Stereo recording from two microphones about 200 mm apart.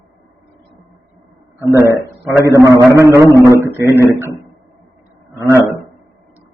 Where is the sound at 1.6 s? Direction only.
15° right (ahead or behind).